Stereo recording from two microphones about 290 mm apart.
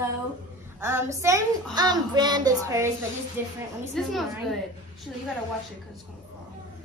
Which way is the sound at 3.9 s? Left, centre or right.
Centre.